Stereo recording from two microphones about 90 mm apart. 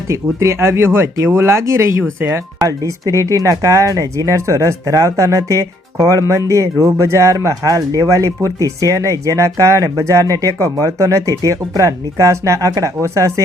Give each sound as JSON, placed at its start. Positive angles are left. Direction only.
{"t": 0.1, "sound": "speech", "side_deg": -35}